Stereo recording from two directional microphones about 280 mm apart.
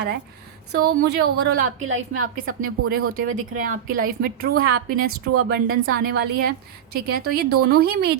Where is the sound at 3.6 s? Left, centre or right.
Right.